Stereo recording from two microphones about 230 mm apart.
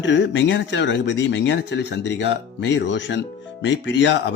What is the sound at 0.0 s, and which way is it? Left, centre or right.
Speech, left.